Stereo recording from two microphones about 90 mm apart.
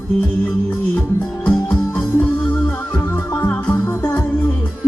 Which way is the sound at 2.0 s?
20° left (ahead or behind).